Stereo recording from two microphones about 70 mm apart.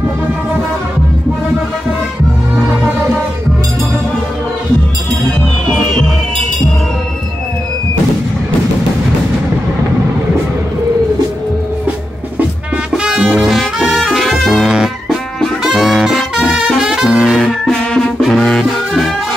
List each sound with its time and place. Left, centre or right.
12.9 s music: centre
15.6 s brass instrument: centre
16.8 s music: centre